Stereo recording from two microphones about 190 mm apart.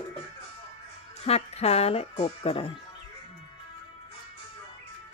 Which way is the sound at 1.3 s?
35° left (ahead or behind).